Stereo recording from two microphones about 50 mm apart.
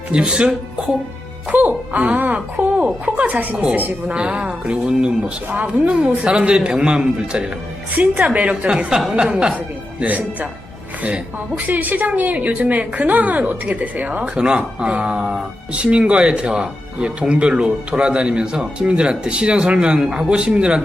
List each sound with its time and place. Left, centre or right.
0.1 s speech: centre
1.5 s speech: right
9.6 s speech: right
11.5 s a woman's voice: right; by 20.8 s centre